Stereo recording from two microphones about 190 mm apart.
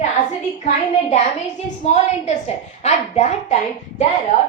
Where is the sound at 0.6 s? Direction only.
35° left (ahead or behind).